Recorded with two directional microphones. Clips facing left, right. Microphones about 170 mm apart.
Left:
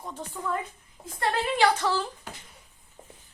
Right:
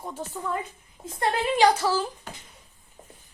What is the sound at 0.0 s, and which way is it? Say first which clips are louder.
Speech: right 3 dB; 10° right (ahead or behind).